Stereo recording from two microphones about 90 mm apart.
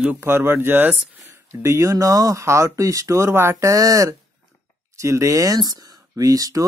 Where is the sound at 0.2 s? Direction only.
25° right (ahead or behind).